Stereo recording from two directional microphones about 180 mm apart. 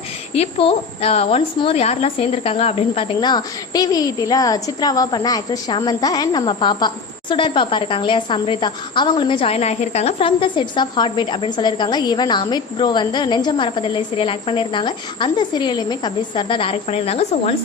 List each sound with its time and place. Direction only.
0.3 s a woman's voice: 35° left (ahead or behind)